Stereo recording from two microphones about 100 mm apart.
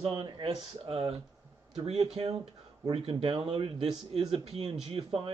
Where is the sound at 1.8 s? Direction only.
90° right.